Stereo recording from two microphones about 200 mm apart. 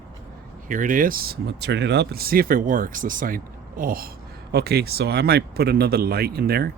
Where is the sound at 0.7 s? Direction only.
40° right (ahead or behind).